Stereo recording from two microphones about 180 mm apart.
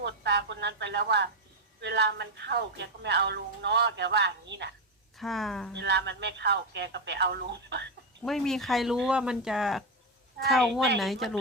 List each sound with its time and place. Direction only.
0.0 s speech: 70° right (ahead or behind)
5.1 s speech: centre (ahead or behind)
5.7 s speech: 70° right (ahead or behind)
8.2 s speech: centre (ahead or behind)